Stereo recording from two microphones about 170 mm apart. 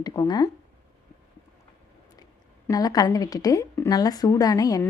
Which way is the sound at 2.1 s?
20° left (ahead or behind).